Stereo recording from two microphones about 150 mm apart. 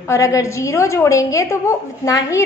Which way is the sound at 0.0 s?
20° left (ahead or behind).